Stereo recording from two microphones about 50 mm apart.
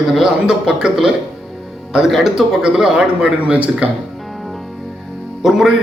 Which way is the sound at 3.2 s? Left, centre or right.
Right.